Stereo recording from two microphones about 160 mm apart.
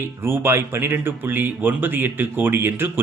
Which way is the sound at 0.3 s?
15° right (ahead or behind).